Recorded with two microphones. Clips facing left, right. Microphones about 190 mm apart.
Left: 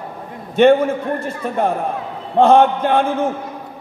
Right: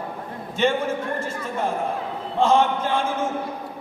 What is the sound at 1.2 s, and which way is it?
A man's voice, 60° left (ahead or behind).